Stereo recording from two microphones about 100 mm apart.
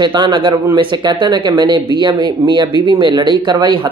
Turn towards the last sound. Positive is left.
turn(degrees=-45)  # may be behind; listen again after turning